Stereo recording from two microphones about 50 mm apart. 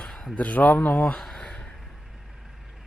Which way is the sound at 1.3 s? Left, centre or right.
Centre.